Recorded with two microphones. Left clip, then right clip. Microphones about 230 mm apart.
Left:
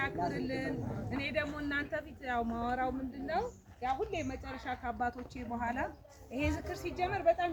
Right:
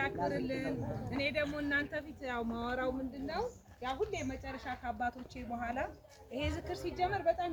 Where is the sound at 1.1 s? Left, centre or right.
Centre.